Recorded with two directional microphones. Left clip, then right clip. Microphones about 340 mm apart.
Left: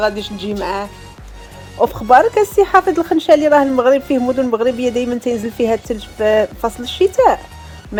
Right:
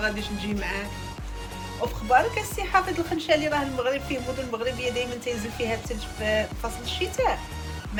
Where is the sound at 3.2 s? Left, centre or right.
Centre.